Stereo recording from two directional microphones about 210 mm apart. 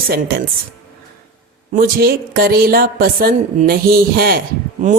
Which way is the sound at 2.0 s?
45° right (ahead or behind).